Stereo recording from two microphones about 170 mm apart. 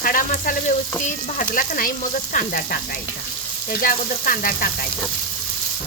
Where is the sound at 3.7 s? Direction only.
55° left (ahead or behind).